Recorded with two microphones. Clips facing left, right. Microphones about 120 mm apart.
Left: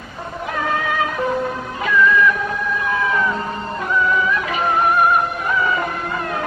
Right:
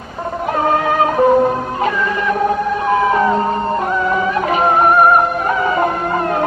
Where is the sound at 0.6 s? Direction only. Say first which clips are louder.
Right 6 dB; 40° right (ahead or behind).